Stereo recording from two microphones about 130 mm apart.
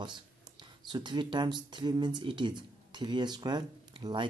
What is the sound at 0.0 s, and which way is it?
Speech, 35° right (ahead or behind).